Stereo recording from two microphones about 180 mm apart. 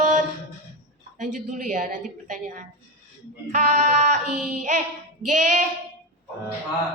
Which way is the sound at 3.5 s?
40° right (ahead or behind).